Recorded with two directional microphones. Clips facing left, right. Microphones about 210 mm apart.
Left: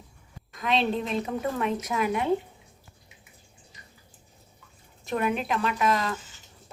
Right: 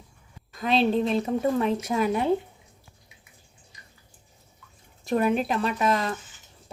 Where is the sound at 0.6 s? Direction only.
35° right (ahead or behind).